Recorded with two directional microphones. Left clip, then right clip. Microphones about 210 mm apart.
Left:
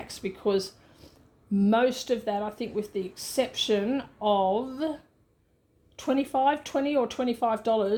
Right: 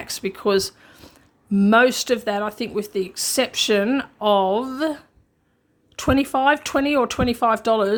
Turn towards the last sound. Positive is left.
turn(degrees=-30)  # may be behind; listen again after turning